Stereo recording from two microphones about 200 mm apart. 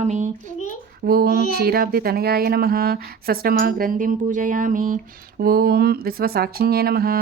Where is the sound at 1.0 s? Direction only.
50° right (ahead or behind).